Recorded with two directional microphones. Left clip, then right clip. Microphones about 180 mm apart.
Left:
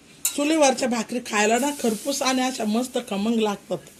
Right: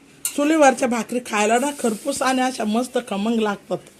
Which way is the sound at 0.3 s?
20° right (ahead or behind).